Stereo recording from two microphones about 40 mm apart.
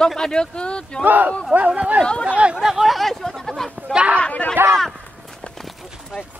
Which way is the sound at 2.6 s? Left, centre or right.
Centre.